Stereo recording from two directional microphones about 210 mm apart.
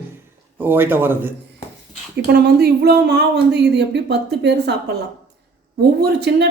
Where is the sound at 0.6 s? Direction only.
10° right (ahead or behind).